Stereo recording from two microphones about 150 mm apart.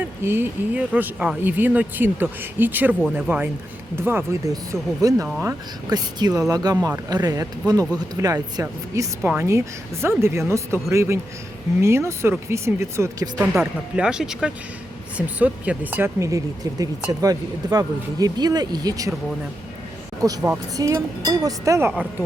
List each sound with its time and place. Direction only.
0.2 s speech: 15° right (ahead or behind)
13.5 s speech: 5° right (ahead or behind); by 19.1 s 25° right (ahead or behind)
20.2 s speech: 20° right (ahead or behind)